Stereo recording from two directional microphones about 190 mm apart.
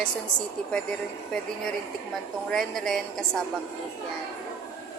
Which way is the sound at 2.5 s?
Centre (ahead or behind).